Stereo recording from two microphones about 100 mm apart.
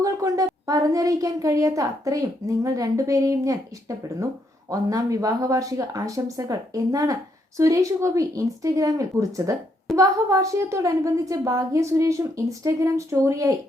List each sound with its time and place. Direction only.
0.0 s speech: 35° right (ahead or behind)